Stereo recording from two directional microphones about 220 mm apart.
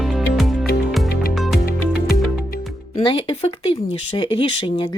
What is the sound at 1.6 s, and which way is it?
Music, 45° left (ahead or behind).